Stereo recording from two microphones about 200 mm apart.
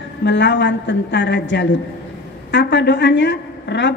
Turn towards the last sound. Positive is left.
turn(degrees=65)  # may be behind; listen again after turning